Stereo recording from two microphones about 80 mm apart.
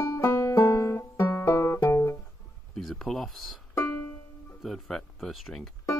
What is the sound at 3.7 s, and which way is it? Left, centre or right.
Music, left.